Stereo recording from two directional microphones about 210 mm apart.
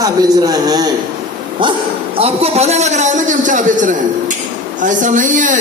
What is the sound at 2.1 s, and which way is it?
A man's voice, 30° right (ahead or behind).